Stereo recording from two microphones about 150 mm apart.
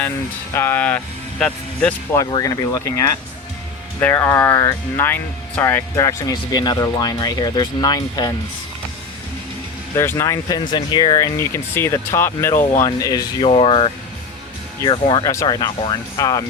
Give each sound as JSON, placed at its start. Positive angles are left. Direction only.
{"t": 0.5, "sound": "speech", "side_deg": 15}
{"t": 2.4, "sound": "speech", "side_deg": 25}
{"t": 4.0, "sound": "speech", "side_deg": 15}
{"t": 9.9, "sound": "speech", "side_deg": 20}
{"t": 13.5, "sound": "speech", "side_deg": 40}